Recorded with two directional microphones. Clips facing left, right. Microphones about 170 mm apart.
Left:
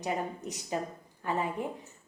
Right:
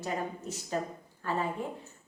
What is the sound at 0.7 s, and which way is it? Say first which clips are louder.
Speech: right 1 dB; 10° left (ahead or behind).